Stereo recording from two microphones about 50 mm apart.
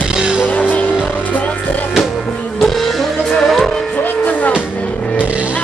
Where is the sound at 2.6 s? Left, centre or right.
Centre.